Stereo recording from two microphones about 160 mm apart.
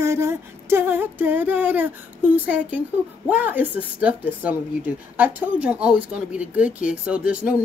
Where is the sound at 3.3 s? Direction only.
10° right (ahead or behind).